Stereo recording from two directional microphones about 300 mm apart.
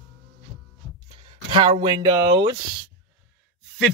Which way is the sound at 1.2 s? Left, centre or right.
Centre.